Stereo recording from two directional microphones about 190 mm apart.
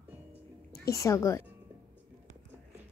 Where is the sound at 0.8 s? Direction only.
15° left (ahead or behind).